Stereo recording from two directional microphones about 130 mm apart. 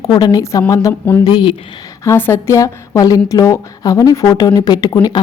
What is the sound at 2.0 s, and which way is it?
A woman's voice, 20° left (ahead or behind).